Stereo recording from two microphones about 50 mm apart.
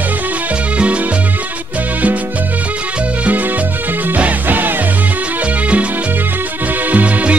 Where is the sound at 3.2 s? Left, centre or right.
Right.